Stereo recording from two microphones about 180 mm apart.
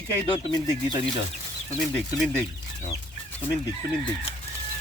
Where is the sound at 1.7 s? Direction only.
5° left (ahead or behind).